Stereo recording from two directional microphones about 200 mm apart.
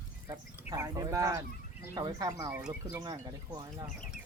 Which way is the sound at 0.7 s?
15° right (ahead or behind).